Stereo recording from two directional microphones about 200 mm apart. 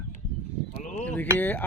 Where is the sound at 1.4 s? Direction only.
10° left (ahead or behind).